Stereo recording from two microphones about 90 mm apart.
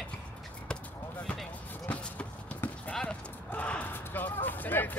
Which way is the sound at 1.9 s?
15° left (ahead or behind).